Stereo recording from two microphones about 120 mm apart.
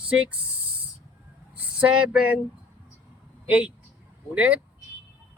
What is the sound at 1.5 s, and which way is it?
Speech, 10° right (ahead or behind).